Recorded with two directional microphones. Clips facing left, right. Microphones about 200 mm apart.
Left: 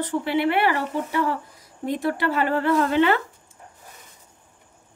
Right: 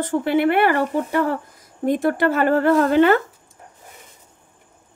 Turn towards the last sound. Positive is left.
turn(degrees=-45)  # may be behind; listen again after turning